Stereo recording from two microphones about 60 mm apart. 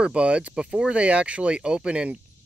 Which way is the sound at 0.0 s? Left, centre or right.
Centre.